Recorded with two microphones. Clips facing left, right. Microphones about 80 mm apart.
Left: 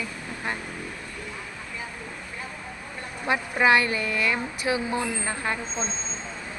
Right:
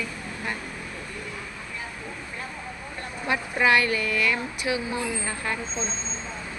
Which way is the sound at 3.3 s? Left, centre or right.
Left.